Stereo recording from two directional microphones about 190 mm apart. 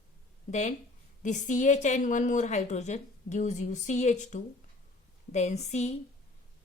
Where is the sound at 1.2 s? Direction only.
40° left (ahead or behind).